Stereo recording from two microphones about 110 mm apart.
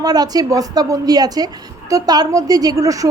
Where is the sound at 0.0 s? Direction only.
35° right (ahead or behind).